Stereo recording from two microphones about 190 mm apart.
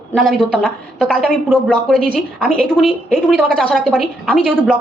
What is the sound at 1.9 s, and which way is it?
Speech, 50° right (ahead or behind).